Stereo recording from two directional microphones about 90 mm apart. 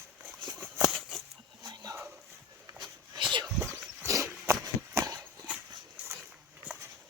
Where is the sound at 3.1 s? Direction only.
60° right (ahead or behind).